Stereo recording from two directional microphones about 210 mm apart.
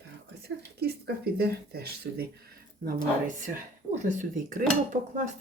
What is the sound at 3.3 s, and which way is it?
Dishes, 35° right (ahead or behind).